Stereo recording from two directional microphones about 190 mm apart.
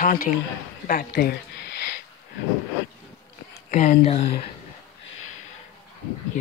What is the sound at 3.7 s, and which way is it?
Speech, 40° left (ahead or behind).